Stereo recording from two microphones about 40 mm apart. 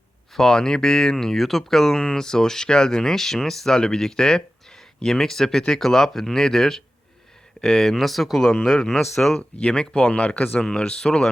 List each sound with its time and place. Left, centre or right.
0.3 s speech: centre
9.4 s speech: left
10.2 s speech: left
10.6 s speech: centre